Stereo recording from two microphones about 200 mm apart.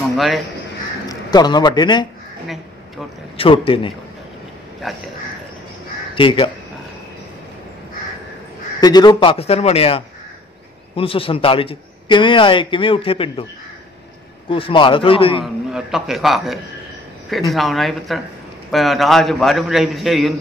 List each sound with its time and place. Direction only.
1.0 s a man's voice: 20° left (ahead or behind)
3.3 s a man's voice: 25° left (ahead or behind)
4.8 s a man's voice: centre (ahead or behind)
6.1 s a man's voice: 25° left (ahead or behind)
8.8 s a man's voice: 20° left (ahead or behind)
14.5 s a man's voice: 25° left (ahead or behind)
15.4 s a man's voice: centre (ahead or behind)